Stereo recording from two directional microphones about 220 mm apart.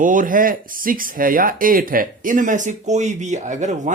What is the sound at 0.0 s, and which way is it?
Speech, 35° right (ahead or behind).